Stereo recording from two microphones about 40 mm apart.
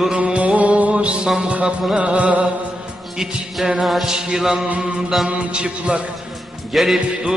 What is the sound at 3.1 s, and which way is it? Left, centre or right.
Music, centre.